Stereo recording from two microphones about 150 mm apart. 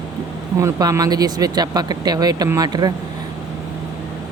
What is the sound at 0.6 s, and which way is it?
Speech, 20° right (ahead or behind).